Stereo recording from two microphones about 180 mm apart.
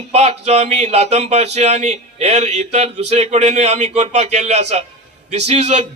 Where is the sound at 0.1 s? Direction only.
35° right (ahead or behind).